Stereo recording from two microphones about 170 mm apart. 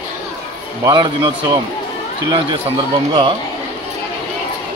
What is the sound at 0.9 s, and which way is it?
Speech, 25° right (ahead or behind).